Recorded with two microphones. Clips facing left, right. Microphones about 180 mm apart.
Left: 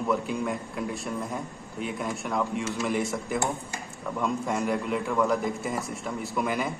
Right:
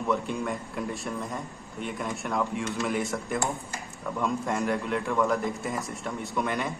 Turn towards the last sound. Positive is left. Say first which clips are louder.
# left 1 dB
turn(degrees=0)  # may be behind; listen again after turning